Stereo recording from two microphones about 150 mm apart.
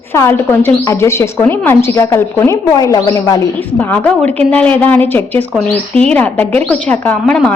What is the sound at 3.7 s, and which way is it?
A woman's voice, 10° left (ahead or behind).